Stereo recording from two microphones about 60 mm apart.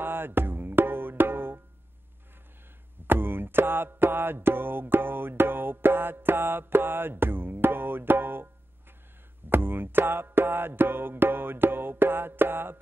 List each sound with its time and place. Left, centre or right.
0.0 s percussion: right
3.1 s music: right
9.5 s music: right